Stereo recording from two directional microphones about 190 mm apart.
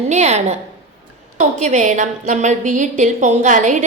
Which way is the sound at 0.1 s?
35° right (ahead or behind).